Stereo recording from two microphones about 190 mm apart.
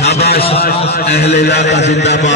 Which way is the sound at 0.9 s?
55° left (ahead or behind).